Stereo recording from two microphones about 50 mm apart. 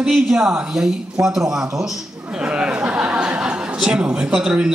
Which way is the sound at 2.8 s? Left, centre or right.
Right.